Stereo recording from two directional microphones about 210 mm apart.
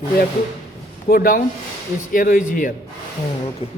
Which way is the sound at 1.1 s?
40° left (ahead or behind).